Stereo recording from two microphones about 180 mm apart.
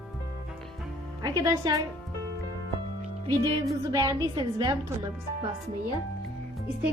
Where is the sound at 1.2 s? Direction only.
20° right (ahead or behind).